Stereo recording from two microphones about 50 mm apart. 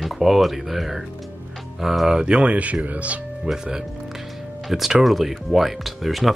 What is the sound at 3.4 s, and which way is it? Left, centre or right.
Speech, centre.